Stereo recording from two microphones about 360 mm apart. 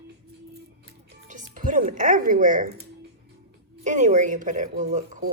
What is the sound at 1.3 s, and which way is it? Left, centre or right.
Speech, centre.